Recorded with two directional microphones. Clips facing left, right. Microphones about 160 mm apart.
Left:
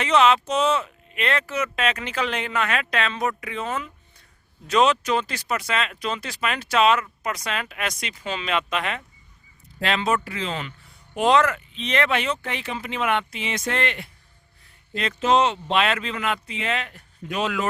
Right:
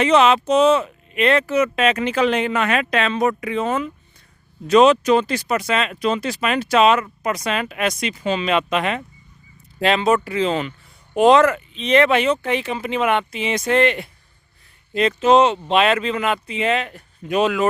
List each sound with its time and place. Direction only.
0.0 s speech: 15° right (ahead or behind)